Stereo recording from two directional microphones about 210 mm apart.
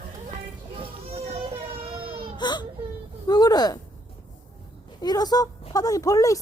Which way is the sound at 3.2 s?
20° left (ahead or behind).